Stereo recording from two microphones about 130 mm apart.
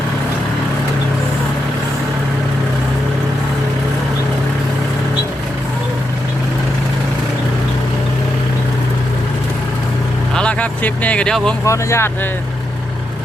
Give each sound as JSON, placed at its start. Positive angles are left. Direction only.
{"t": 10.3, "sound": "speech", "side_deg": 10}
{"t": 11.6, "sound": "speech", "side_deg": 20}